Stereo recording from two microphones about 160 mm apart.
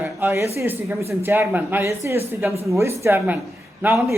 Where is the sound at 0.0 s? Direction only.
15° right (ahead or behind).